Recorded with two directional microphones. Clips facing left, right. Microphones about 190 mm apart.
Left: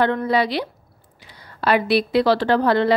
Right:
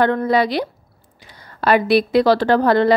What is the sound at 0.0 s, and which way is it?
A woman's voice, 45° right (ahead or behind).